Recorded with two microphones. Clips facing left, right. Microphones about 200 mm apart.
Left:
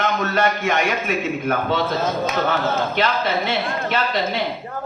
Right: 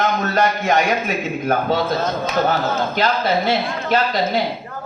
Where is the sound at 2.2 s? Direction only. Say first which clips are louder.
Right 2 dB; 40° right (ahead or behind).